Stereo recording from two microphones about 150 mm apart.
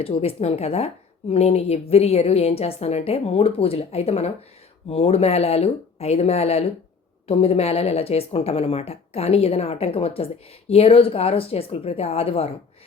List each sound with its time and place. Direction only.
0.0 s a woman's voice: 40° left (ahead or behind)